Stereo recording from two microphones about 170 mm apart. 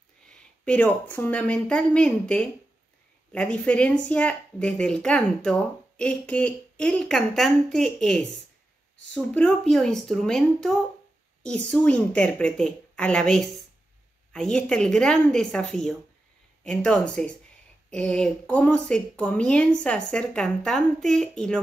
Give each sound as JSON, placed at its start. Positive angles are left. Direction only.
{"t": 0.3, "sound": "a woman's voice", "side_deg": 5}